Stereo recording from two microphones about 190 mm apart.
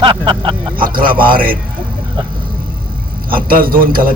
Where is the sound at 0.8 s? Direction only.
50° right (ahead or behind).